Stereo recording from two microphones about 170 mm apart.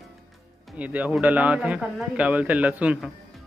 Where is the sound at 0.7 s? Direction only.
10° right (ahead or behind).